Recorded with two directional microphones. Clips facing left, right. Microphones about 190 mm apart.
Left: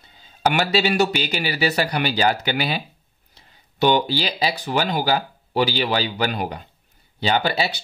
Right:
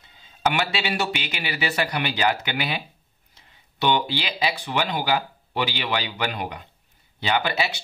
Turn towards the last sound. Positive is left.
turn(degrees=35)  # may be behind; listen again after turning